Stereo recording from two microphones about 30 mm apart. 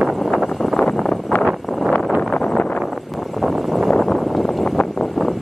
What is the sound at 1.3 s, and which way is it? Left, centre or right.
Vehicle, left.